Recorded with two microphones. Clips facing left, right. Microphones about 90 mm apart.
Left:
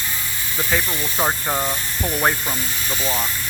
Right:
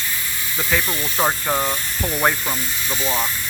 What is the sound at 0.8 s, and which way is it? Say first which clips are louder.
Speech: right 1 dB; centre (ahead or behind).